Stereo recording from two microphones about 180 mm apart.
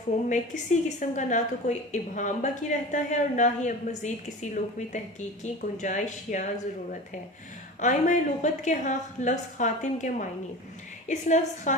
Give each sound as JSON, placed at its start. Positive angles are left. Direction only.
{"t": 0.3, "sound": "a woman's voice", "side_deg": 40}
{"t": 5.4, "sound": "a woman's voice", "side_deg": 45}
{"t": 7.8, "sound": "a woman's voice", "side_deg": 45}